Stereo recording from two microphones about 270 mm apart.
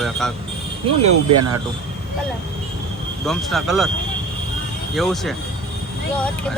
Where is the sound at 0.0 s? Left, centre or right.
Centre.